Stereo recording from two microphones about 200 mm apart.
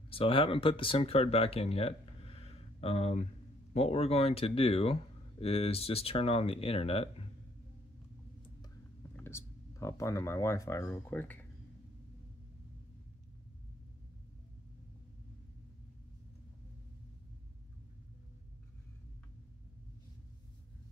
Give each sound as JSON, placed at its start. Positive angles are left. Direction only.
{"t": 0.1, "sound": "speech", "side_deg": 25}
{"t": 9.1, "sound": "speech", "side_deg": 10}